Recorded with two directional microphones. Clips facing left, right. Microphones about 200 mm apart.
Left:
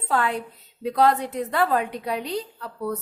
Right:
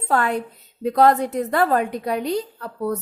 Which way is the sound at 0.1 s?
45° right (ahead or behind).